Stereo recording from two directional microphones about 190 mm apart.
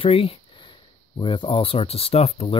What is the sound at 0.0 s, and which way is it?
Speech, 30° left (ahead or behind).